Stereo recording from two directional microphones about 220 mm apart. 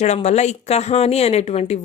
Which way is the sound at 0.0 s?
30° left (ahead or behind).